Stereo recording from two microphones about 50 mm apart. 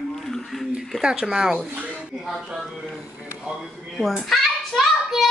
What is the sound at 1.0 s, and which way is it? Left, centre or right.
Speech, centre.